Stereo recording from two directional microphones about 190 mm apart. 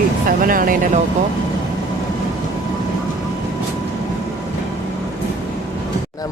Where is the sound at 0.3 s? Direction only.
50° right (ahead or behind).